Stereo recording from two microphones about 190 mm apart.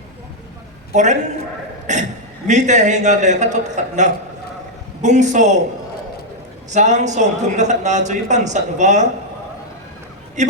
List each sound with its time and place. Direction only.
0.9 s a man's voice: 40° right (ahead or behind)
6.7 s a man's voice: 40° right (ahead or behind)
10.4 s a man's voice: 40° right (ahead or behind)